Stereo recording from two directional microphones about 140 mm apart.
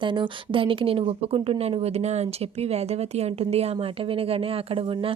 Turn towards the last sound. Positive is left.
turn(degrees=-40)  # may be behind; listen again after turning